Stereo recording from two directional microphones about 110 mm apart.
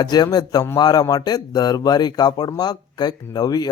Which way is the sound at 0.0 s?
40° left (ahead or behind).